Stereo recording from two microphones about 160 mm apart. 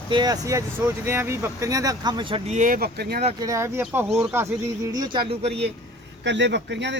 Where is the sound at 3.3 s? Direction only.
20° right (ahead or behind).